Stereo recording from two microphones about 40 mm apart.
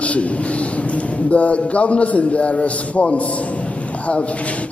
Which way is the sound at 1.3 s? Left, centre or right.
Left.